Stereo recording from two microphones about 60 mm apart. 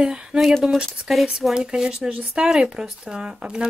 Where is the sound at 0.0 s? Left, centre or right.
Centre.